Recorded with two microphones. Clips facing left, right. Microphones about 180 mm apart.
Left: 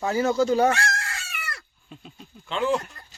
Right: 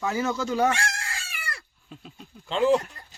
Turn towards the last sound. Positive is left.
turn(degrees=-10)  # may be behind; listen again after turning